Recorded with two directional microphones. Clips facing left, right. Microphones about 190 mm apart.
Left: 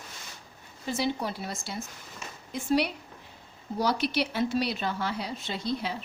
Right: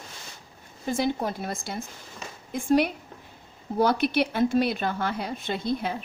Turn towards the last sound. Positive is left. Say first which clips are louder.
# right 4 dB
turn(degrees=-50)  # may be behind; listen again after turning